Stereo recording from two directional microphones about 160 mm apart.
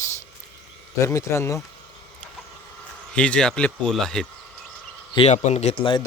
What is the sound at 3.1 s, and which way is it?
Speech, 5° left (ahead or behind).